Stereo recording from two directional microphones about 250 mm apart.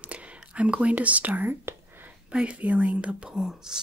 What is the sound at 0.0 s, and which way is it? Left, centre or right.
Speech, centre.